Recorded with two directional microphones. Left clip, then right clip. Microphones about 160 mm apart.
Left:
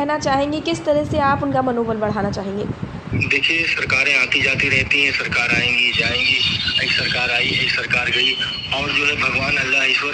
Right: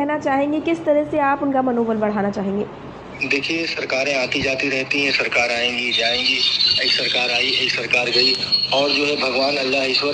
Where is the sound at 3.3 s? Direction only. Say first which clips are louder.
Left 4 dB; 20° left (ahead or behind).